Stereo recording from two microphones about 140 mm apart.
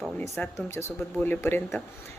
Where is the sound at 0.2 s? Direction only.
15° left (ahead or behind).